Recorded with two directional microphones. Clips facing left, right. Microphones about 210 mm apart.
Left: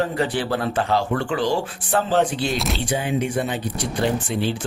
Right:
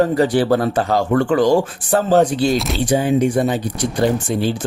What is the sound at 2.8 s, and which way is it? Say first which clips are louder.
Speech: right 10 dB; 40° right (ahead or behind).